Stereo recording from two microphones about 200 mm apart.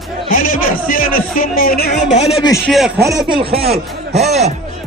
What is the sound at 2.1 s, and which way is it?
Speech, 30° left (ahead or behind).